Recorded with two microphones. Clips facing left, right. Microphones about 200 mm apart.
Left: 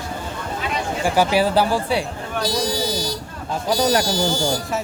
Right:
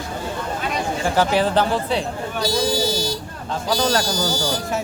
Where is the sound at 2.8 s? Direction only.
25° right (ahead or behind).